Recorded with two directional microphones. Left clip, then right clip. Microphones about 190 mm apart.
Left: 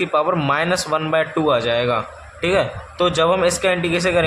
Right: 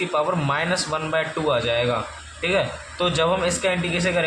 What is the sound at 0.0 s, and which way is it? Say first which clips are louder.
Speech: left 4 dB; 20° left (ahead or behind).